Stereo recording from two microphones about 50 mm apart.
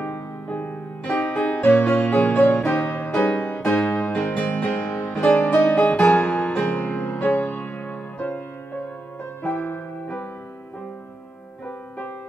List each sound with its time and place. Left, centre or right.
0.0 s music: left
1.6 s music: left
2.0 s music: left
2.5 s music: centre
5.7 s music: left
5.9 s music: left
6.6 s music: left